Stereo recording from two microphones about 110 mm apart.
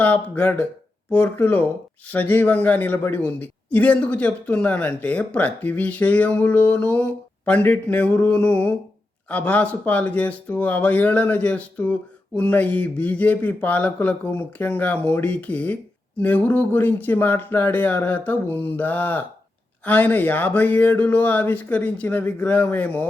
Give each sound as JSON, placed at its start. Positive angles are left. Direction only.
{"t": 0.0, "sound": "a woman's voice", "side_deg": 15}